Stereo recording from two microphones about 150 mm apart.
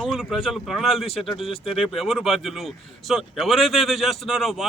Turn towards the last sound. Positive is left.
turn(degrees=0)  # may be behind; listen again after turning